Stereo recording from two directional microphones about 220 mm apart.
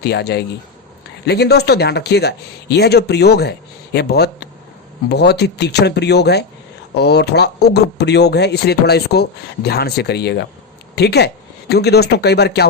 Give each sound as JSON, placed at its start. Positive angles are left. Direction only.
{"t": 0.0, "sound": "speech", "side_deg": 50}